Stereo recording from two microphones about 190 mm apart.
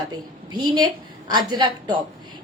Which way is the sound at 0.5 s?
20° right (ahead or behind).